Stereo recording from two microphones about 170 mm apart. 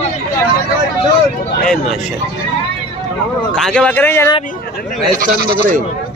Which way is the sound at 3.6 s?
5° left (ahead or behind).